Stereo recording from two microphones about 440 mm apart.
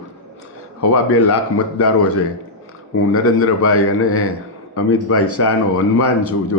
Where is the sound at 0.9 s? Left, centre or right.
Left.